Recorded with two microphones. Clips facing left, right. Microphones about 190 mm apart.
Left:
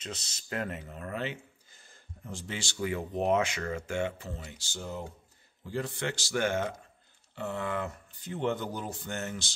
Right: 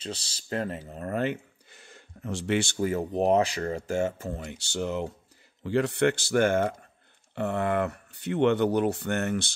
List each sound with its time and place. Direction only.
0.0 s speech: 30° right (ahead or behind); by 9.5 s 60° right (ahead or behind)